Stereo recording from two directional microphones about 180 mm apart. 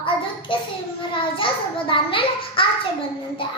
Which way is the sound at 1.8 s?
30° left (ahead or behind).